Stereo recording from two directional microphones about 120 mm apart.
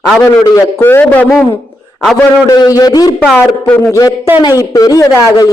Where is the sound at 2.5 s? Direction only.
30° left (ahead or behind).